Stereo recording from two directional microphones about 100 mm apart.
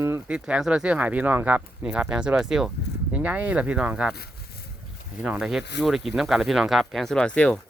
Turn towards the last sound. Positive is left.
turn(degrees=10)  # may be behind; listen again after turning